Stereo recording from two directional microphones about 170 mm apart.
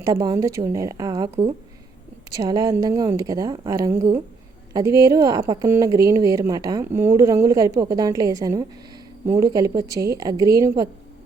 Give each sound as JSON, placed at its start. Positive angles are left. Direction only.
{"t": 0.0, "sound": "a woman's voice", "side_deg": -20}